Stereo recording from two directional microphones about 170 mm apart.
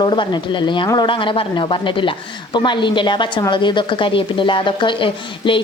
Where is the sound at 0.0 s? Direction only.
30° left (ahead or behind).